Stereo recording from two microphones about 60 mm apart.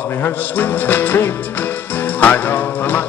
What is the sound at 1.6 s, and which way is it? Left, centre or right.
Music, left.